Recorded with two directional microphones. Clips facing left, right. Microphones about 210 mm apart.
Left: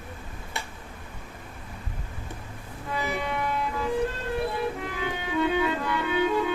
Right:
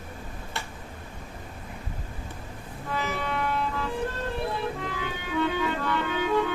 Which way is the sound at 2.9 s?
15° left (ahead or behind).